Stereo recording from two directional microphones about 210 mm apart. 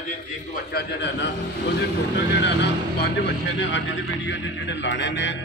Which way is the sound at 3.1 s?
60° left (ahead or behind).